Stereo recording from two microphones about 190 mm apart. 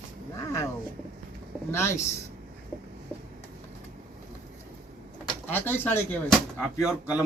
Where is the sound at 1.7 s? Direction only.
15° left (ahead or behind).